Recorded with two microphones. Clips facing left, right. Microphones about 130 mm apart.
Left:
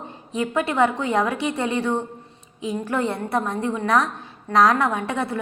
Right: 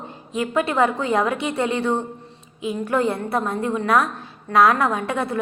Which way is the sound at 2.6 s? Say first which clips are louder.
Right 2 dB; 30° left (ahead or behind).